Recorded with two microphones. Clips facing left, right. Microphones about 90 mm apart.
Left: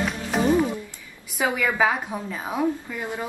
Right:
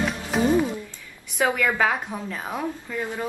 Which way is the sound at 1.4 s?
10° left (ahead or behind).